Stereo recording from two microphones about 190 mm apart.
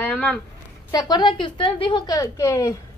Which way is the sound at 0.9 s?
20° left (ahead or behind).